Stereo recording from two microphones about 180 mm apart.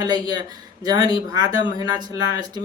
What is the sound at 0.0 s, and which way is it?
Speech, 20° right (ahead or behind).